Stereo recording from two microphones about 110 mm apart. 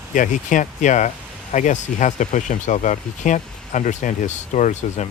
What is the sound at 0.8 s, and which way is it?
Speech, 90° left.